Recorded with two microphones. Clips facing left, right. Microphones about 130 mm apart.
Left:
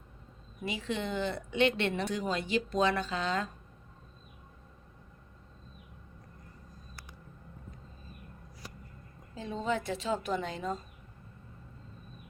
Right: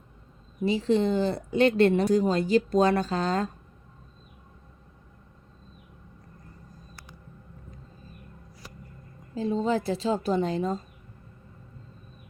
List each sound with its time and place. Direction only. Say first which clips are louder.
0.6 s speech: right 11 dB; 35° right (ahead or behind)
9.3 s speech: right 7 dB; 35° right (ahead or behind)